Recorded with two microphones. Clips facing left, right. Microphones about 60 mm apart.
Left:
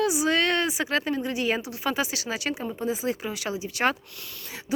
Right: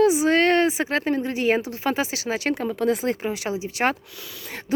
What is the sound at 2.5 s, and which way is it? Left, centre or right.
Speech, right.